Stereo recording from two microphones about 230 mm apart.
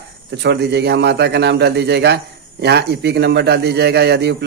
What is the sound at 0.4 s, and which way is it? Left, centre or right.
Speech, right.